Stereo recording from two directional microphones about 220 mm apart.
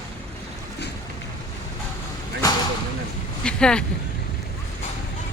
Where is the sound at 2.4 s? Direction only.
15° left (ahead or behind).